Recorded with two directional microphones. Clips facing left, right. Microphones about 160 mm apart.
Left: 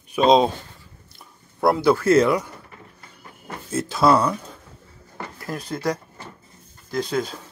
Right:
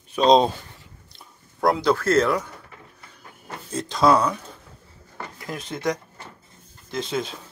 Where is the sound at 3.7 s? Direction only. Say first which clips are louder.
Left 1 dB; 5° left (ahead or behind).